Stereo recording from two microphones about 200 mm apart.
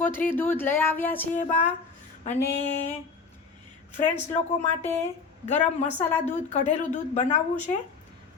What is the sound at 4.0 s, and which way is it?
Speech, 35° left (ahead or behind).